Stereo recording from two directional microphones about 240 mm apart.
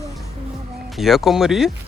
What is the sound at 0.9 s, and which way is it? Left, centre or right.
Speech, centre.